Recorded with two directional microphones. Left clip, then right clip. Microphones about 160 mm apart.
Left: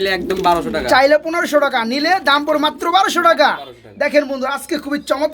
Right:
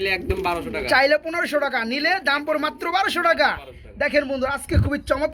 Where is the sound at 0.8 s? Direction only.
10° left (ahead or behind).